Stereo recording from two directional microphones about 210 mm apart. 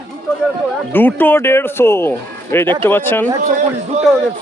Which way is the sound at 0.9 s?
10° left (ahead or behind).